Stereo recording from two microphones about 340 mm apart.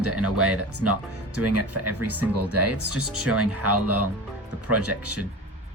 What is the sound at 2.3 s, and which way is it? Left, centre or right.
Speech, right.